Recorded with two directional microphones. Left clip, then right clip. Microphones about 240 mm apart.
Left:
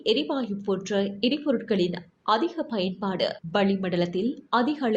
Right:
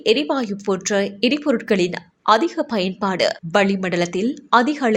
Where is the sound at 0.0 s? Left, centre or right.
Right.